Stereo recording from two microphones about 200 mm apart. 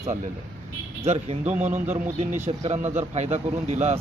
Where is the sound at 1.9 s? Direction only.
35° right (ahead or behind).